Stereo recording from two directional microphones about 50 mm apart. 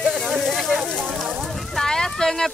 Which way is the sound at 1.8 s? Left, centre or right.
Centre.